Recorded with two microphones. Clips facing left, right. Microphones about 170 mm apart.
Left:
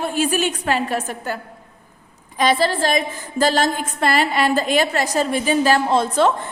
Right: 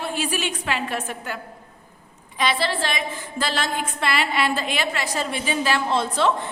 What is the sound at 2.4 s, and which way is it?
A woman's voice, 40° left (ahead or behind).